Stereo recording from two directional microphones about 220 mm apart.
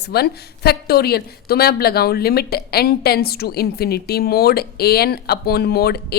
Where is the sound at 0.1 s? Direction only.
45° left (ahead or behind).